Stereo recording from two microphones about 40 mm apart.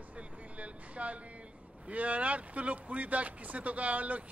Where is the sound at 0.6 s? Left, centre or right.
Right.